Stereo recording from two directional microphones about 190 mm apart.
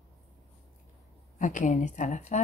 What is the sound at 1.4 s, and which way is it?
A woman's voice, 40° left (ahead or behind).